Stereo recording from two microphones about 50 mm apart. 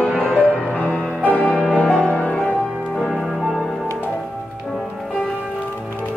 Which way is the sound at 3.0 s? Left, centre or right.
Centre.